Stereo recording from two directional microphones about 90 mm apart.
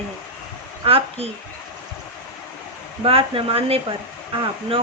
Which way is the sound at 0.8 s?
90° right.